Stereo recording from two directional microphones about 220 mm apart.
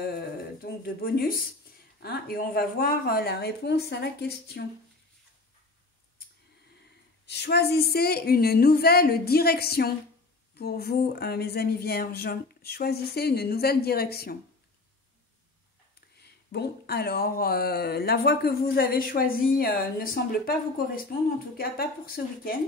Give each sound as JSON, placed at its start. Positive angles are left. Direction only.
{"t": 0.6, "sound": "a sound", "side_deg": 45}
{"t": 1.0, "sound": "speech", "side_deg": 40}
{"t": 7.2, "sound": "speech", "side_deg": 50}
{"t": 16.2, "sound": "speech", "side_deg": 45}